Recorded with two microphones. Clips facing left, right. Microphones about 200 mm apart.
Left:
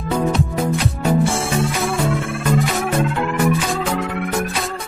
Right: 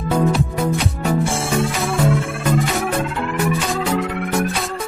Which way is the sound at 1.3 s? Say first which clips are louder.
Even; centre (ahead or behind).